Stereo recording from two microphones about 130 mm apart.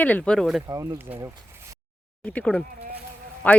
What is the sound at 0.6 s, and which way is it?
Speech, 25° right (ahead or behind).